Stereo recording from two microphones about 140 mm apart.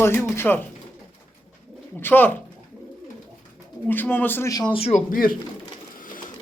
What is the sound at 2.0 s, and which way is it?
Speech, 15° left (ahead or behind).